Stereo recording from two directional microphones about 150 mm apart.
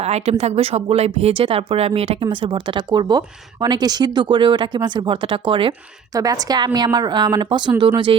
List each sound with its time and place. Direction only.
0.0 s speech: 45° right (ahead or behind)
6.1 s speech: 25° right (ahead or behind)